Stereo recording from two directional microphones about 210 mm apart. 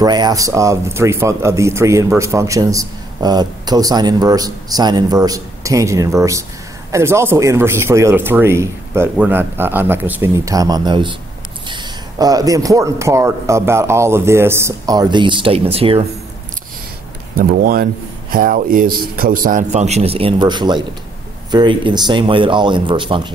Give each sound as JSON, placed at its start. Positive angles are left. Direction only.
{"t": 0.0, "sound": "speech", "side_deg": -20}
{"t": 17.4, "sound": "a man's voice", "side_deg": -45}